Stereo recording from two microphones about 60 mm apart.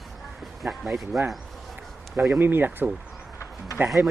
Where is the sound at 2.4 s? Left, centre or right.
Right.